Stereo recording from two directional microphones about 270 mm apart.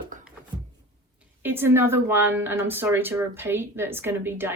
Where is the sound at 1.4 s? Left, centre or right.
Centre.